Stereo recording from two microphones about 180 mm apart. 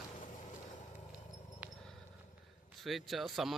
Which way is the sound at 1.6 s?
10° right (ahead or behind).